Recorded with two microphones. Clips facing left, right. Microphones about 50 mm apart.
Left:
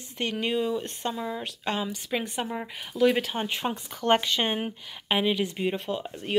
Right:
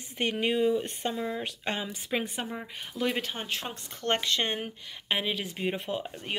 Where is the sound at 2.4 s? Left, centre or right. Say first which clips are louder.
Left 4 dB; centre.